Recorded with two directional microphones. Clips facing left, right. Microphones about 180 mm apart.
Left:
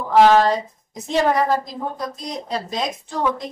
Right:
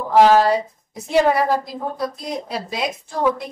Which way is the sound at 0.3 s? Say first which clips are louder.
Right 1 dB; 10° right (ahead or behind).